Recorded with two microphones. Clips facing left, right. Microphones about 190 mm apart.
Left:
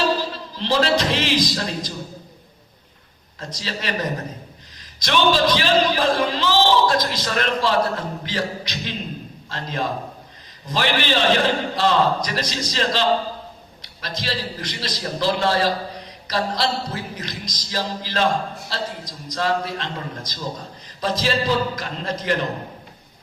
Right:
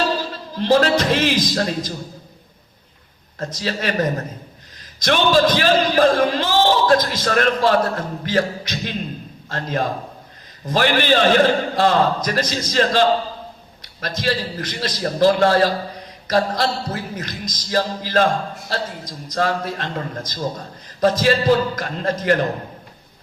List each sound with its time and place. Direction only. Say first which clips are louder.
0.5 s a man's voice: right 4 dB; 50° right (ahead or behind)
3.3 s a man's voice: right 6 dB; 50° right (ahead or behind)
4.9 s a man's voice: right 3 dB; 50° right (ahead or behind)
14.2 s a man's voice: right 5 dB; 50° right (ahead or behind)